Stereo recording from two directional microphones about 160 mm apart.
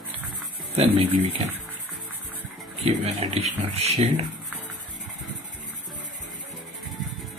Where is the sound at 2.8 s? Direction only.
45° right (ahead or behind).